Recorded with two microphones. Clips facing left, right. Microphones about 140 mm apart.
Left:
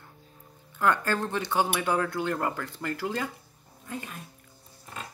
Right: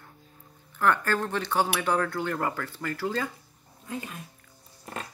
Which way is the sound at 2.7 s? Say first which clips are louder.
Right 1 dB; 15° left (ahead or behind).